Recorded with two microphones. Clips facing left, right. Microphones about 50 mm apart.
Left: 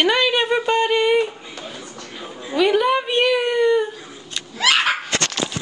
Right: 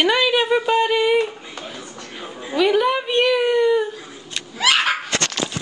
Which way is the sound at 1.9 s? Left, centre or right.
Centre.